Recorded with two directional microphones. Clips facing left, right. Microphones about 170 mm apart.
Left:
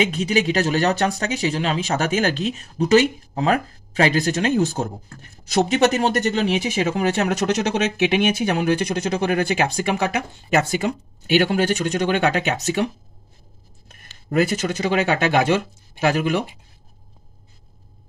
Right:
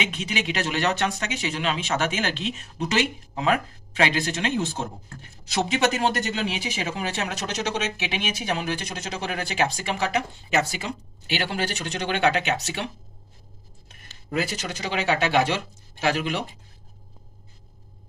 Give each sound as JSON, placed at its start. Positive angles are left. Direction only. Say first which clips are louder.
{"t": 0.0, "sound": "speech", "louder": "left 9 dB", "side_deg": 40}